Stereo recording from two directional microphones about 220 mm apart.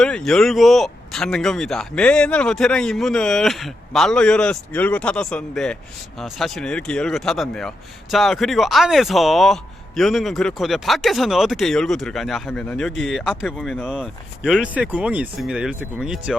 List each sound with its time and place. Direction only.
0.0 s speech: 5° left (ahead or behind)